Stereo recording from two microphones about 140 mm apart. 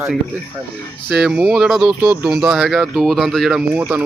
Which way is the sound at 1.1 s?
5° right (ahead or behind).